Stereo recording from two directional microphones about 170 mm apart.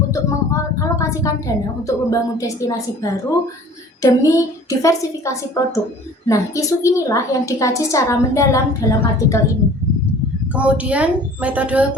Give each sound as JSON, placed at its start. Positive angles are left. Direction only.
{"t": 0.1, "sound": "a woman's voice", "side_deg": 20}
{"t": 10.5, "sound": "a woman's voice", "side_deg": -10}